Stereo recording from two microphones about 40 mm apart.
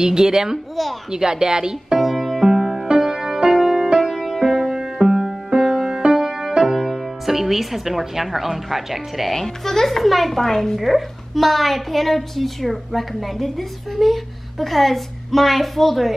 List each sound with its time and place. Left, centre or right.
0.0 s speech: centre
2.0 s music: centre
6.2 s music: centre
6.5 s speech: centre
10.8 s a woman's voice: centre